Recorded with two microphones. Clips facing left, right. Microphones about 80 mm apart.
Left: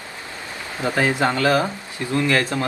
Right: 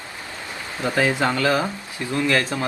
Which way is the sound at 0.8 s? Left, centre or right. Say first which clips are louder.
Even; centre.